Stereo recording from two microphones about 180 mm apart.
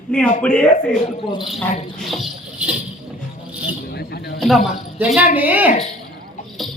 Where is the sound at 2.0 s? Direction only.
Centre (ahead or behind).